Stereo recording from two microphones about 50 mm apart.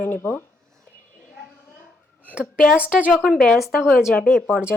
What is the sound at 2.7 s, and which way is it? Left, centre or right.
Speech, right.